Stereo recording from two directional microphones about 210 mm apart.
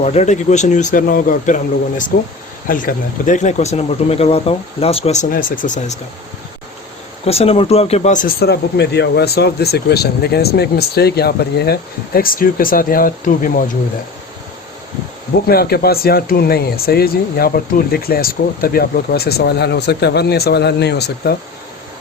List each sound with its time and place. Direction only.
0.0 s speech: 30° left (ahead or behind)
7.3 s speech: 30° left (ahead or behind)
15.4 s speech: 45° left (ahead or behind)